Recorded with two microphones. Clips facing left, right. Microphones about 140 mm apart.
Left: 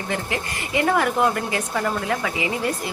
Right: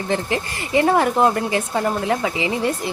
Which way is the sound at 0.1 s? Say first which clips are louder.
Right 5 dB; 30° right (ahead or behind).